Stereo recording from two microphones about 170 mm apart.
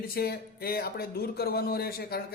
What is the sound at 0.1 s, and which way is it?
Speech, 65° left (ahead or behind).